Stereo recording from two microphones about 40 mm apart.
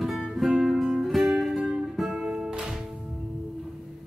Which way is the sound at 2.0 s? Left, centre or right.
Centre.